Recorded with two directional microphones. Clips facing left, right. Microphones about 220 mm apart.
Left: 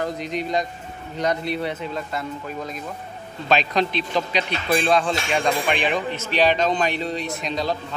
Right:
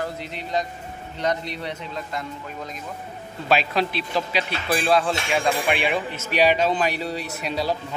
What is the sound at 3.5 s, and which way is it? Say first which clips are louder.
Speech: left 1 dB; 5° right (ahead or behind).